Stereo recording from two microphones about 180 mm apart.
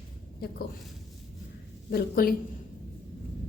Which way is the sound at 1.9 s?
55° left (ahead or behind).